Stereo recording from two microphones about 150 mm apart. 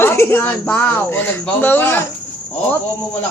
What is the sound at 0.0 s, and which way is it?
Speech, 15° left (ahead or behind).